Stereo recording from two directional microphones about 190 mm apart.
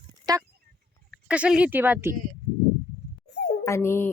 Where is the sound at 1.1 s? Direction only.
5° right (ahead or behind).